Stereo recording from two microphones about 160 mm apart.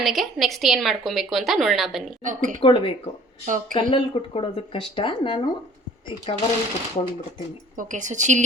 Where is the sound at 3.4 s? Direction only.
55° right (ahead or behind).